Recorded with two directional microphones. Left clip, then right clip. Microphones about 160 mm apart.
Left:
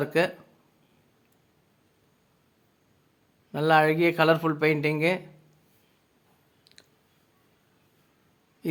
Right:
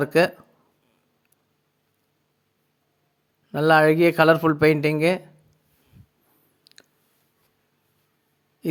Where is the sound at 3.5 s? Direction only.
35° right (ahead or behind).